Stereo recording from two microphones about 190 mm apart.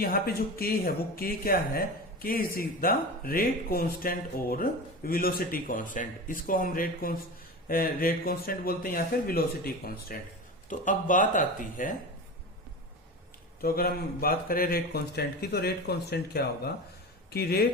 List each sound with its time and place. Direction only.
0.0 s speech: 50° left (ahead or behind)
13.6 s a man's voice: 50° left (ahead or behind)